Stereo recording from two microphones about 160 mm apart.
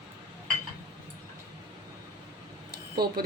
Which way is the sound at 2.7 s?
75° right (ahead or behind).